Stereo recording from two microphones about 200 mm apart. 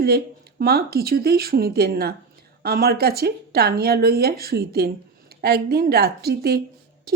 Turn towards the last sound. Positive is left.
turn(degrees=-50)  # may be behind; listen again after turning